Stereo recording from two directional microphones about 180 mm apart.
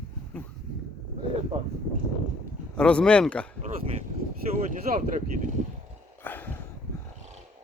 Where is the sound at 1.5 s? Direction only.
35° right (ahead or behind).